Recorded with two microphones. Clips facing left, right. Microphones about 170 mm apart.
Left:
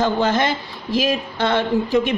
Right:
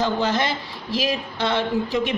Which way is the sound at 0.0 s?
50° left (ahead or behind).